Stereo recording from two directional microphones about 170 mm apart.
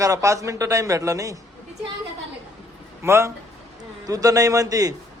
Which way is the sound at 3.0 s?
15° right (ahead or behind).